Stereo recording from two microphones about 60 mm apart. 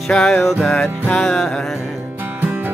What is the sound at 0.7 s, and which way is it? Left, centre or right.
Music, left.